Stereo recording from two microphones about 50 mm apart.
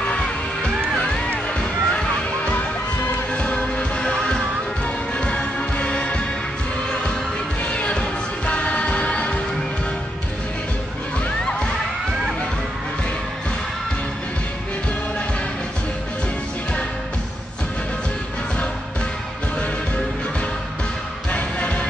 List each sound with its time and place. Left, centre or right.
1.0 s music: left
7.6 s music: left
21.3 s music: left